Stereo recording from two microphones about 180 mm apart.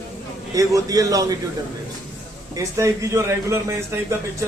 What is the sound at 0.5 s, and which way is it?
Speech, 20° right (ahead or behind).